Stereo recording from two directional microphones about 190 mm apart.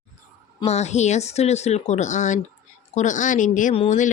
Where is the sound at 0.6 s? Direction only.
35° left (ahead or behind).